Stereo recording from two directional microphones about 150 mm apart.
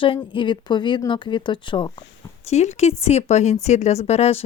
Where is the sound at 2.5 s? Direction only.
50° left (ahead or behind).